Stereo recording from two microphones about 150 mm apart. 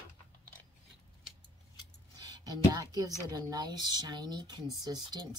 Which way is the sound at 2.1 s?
25° right (ahead or behind).